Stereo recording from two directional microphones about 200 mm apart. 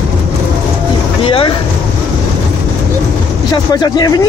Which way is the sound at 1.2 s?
25° left (ahead or behind).